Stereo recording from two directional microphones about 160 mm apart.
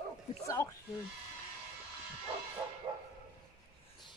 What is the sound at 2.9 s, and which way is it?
Dog, 30° right (ahead or behind).